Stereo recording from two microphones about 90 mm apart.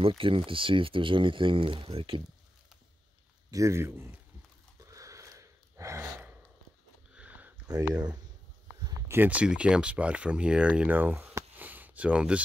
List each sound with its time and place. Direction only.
0.2 s speech: 80° right
3.4 s a man's voice: 35° right (ahead or behind)
4.8 s gasp: 35° right (ahead or behind)
7.2 s a sound: 15° right (ahead or behind)
7.6 s speech: 45° right (ahead or behind)
9.0 s speech: 25° right (ahead or behind)